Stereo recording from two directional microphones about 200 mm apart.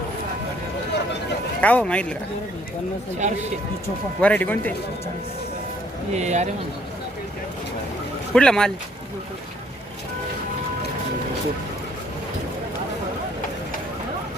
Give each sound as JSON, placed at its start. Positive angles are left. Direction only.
{"t": 1.6, "sound": "speech", "side_deg": 5}
{"t": 3.2, "sound": "speech", "side_deg": -35}
{"t": 4.2, "sound": "speech", "side_deg": 5}
{"t": 6.1, "sound": "speech", "side_deg": -35}
{"t": 8.3, "sound": "speech", "side_deg": 5}